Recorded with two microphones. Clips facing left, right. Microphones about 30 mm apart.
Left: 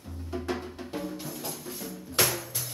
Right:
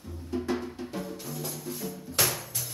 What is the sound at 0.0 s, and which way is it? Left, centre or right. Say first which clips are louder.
Music: right 2 dB; centre.